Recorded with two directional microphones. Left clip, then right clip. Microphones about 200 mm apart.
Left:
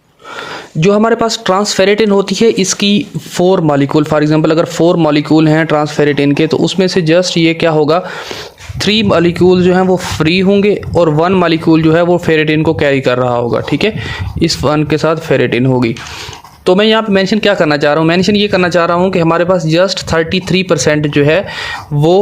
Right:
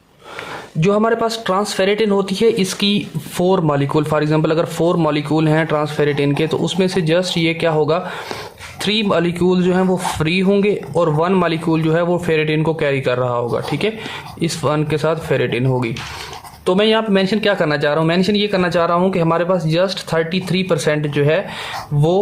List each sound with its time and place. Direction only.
0.8 s speech: 35° left (ahead or behind)